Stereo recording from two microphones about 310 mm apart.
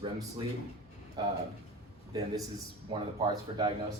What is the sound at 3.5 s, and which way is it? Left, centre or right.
Speech, centre.